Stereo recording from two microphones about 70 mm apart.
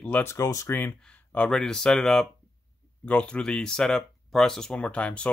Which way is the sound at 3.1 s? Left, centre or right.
Centre.